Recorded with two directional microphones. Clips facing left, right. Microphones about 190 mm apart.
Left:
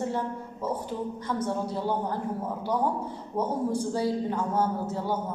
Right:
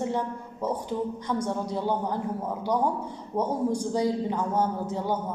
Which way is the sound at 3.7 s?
15° right (ahead or behind).